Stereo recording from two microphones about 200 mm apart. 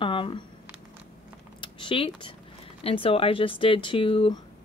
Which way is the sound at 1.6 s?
25° left (ahead or behind).